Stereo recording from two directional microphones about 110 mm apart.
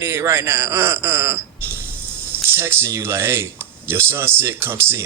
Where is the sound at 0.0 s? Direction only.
25° right (ahead or behind).